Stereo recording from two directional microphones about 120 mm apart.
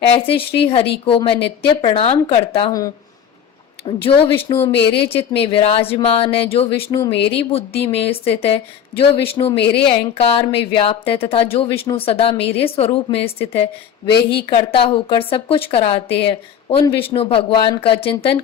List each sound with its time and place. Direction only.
0.2 s speech: 50° left (ahead or behind)
4.1 s speech: 50° left (ahead or behind)
4.5 s a woman's voice: 35° left (ahead or behind)
4.9 s speech: 50° left (ahead or behind)
14.1 s speech: 45° left (ahead or behind)